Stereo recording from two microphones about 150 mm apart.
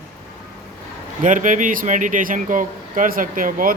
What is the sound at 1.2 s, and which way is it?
Speech, 60° right (ahead or behind).